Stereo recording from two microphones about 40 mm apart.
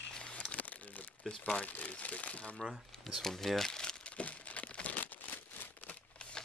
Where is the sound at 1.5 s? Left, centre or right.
Left.